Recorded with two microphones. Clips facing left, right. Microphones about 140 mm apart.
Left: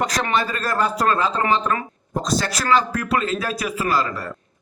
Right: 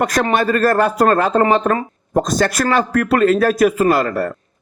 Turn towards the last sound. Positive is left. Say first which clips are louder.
# right 7 dB
turn(degrees=-55)  # may be behind; listen again after turning